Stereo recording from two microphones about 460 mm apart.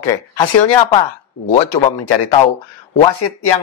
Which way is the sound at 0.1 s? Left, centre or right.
Left.